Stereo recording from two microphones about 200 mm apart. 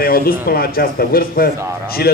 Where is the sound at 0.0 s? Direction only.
50° left (ahead or behind).